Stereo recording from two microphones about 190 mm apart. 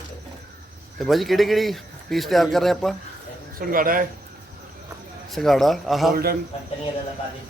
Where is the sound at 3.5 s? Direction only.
50° right (ahead or behind).